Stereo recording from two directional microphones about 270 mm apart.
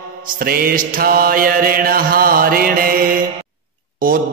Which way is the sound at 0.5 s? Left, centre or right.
Right.